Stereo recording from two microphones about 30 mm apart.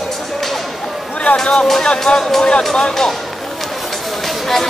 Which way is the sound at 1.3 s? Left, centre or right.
Left.